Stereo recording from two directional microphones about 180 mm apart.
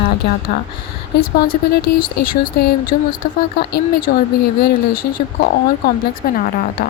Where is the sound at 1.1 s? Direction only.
65° left (ahead or behind).